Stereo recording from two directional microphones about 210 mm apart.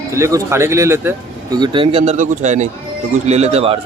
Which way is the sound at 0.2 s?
15° right (ahead or behind).